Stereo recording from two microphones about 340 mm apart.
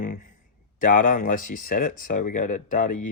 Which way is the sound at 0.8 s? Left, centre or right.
Left.